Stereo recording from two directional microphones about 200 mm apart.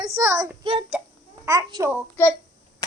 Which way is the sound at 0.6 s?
25° right (ahead or behind).